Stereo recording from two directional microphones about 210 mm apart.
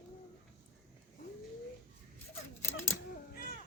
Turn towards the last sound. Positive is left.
turn(degrees=45)  # may be behind; listen again after turning